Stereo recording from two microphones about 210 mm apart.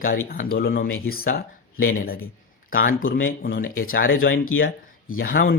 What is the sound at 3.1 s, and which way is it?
Speech, 65° left (ahead or behind).